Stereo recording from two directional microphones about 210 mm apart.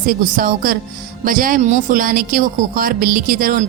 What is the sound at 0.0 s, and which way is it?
A woman's voice, 40° right (ahead or behind).